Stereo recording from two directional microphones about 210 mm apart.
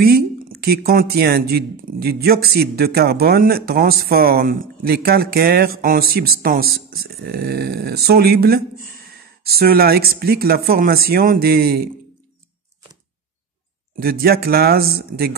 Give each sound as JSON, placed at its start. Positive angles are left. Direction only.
{"t": 0.0, "sound": "speech", "side_deg": -45}
{"t": 13.9, "sound": "speech", "side_deg": -45}